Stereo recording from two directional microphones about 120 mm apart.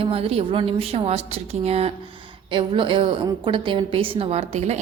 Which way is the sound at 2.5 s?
45° right (ahead or behind).